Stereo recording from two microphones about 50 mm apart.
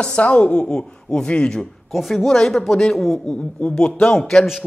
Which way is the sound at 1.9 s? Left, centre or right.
Centre.